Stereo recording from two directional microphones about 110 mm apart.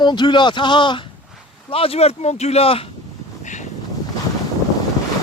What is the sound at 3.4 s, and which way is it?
Wind, 90° left.